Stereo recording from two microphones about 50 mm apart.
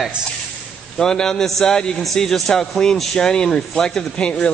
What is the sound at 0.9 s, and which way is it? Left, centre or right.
A man's voice, centre.